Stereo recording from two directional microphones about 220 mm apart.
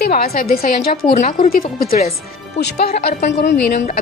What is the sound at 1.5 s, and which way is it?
Speech, 40° left (ahead or behind).